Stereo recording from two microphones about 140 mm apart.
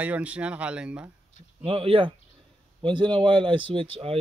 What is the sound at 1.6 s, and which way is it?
Speech, 40° right (ahead or behind).